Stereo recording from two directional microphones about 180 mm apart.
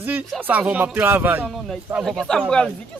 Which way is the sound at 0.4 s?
10° right (ahead or behind).